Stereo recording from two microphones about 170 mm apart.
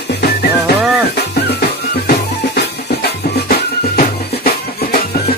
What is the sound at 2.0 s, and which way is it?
Music, 70° left (ahead or behind).